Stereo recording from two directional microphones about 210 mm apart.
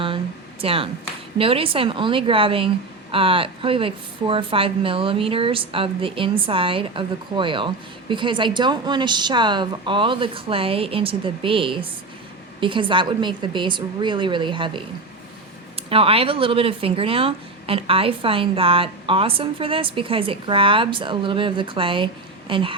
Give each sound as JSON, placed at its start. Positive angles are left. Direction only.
{"t": 0.6, "sound": "speech", "side_deg": -25}